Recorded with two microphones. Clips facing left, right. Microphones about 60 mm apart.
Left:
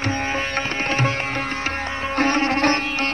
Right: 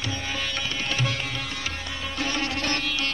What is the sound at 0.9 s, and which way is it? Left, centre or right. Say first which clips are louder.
Music: left 6 dB; left.